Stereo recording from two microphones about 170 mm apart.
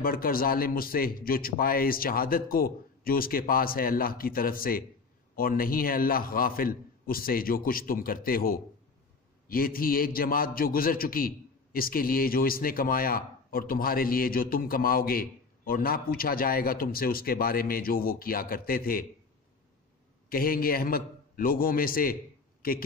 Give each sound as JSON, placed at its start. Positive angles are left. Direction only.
{"t": 0.0, "sound": "a man's voice", "side_deg": 60}
{"t": 20.2, "sound": "a man's voice", "side_deg": 60}